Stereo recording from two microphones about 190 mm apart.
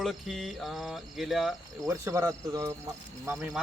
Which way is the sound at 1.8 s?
15° right (ahead or behind).